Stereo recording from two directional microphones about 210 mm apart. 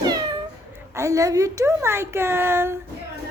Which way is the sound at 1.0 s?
15° right (ahead or behind).